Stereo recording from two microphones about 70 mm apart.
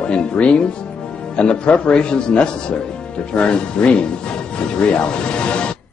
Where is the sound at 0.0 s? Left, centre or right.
Centre.